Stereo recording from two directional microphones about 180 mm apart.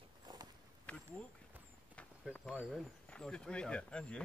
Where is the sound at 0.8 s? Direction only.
5° left (ahead or behind).